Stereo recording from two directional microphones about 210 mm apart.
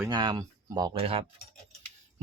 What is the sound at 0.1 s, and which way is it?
Speech, 20° right (ahead or behind).